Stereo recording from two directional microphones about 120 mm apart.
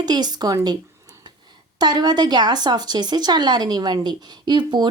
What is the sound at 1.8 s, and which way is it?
Speech, 35° right (ahead or behind).